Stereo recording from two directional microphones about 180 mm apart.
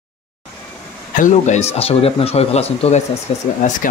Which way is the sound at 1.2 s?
40° left (ahead or behind).